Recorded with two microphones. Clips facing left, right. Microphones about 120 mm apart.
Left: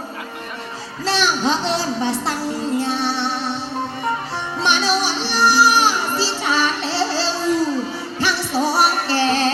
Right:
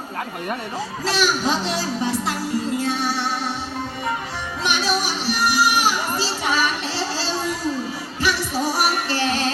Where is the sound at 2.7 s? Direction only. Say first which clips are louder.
Left 2 dB; 30° left (ahead or behind).